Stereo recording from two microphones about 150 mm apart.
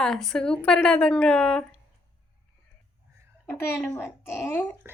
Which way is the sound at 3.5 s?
15° left (ahead or behind).